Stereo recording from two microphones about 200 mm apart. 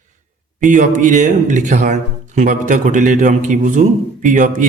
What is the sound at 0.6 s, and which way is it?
Speech, 40° right (ahead or behind).